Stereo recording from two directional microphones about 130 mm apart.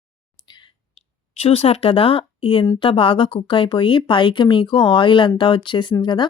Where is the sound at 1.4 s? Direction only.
50° left (ahead or behind).